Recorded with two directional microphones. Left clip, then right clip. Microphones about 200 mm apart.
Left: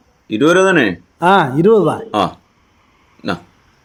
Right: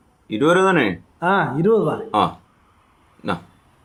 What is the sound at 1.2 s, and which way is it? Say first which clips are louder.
Speech: left 7 dB; 50° left (ahead or behind).